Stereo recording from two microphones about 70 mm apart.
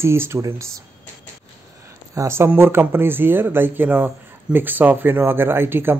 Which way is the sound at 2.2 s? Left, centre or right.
Right.